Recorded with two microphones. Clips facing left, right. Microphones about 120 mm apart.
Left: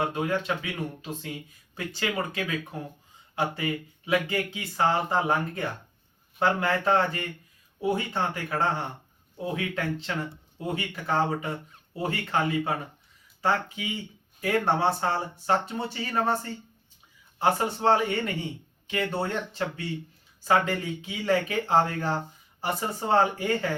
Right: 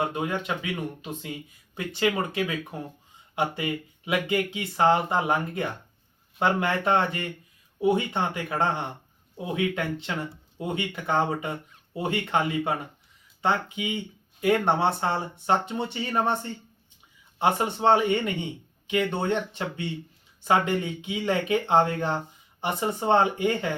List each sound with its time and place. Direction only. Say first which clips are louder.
0.0 s speech: left 1 dB; 20° right (ahead or behind)